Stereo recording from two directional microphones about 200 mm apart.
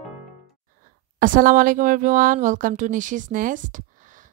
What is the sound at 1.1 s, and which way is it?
Speech, 40° right (ahead or behind).